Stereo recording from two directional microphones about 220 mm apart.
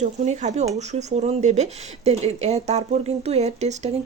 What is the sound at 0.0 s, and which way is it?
A woman's voice, 30° right (ahead or behind).